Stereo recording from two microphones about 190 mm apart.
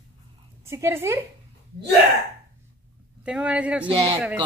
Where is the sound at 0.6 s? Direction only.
15° right (ahead or behind).